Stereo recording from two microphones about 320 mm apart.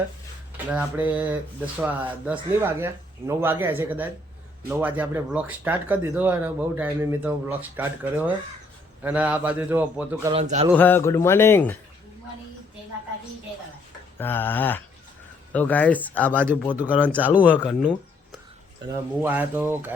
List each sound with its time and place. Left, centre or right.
0.7 s speech: centre
10.3 s speech: right
10.8 s speech: centre
14.2 s speech: centre